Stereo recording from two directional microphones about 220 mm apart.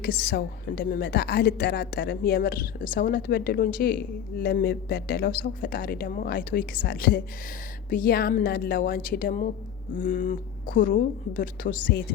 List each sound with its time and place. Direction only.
0.0 s a woman's voice: 45° left (ahead or behind)